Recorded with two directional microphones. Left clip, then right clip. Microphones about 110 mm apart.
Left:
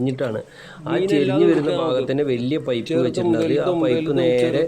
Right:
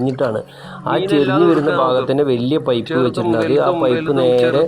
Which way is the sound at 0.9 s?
45° left (ahead or behind).